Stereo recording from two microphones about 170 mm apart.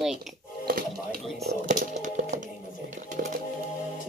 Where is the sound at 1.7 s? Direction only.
45° right (ahead or behind).